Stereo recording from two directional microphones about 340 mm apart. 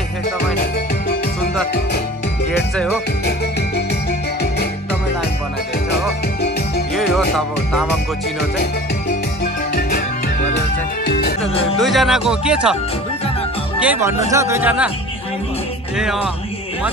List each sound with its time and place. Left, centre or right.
9.4 s music: left
11.1 s music: left
11.8 s speech: centre
13.7 s speech: centre